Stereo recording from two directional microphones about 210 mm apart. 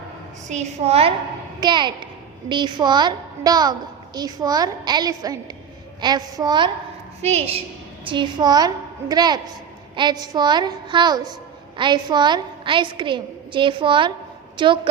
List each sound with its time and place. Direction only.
0.4 s a woman's voice: 35° right (ahead or behind)
7.2 s a woman's voice: 30° right (ahead or behind)